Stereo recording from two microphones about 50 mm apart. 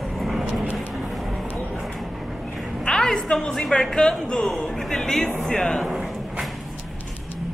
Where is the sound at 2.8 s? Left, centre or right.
Centre.